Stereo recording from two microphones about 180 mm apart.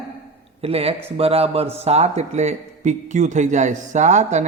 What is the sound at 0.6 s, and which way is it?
A man's voice, 35° right (ahead or behind).